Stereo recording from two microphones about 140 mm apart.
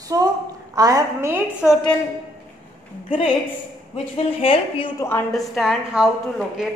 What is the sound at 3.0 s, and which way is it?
Speech, 40° left (ahead or behind).